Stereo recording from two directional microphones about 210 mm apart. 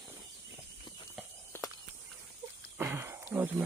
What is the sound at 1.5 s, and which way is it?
Walk, 10° left (ahead or behind).